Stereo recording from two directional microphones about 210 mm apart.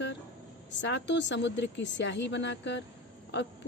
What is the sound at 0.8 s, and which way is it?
Speech, 55° left (ahead or behind).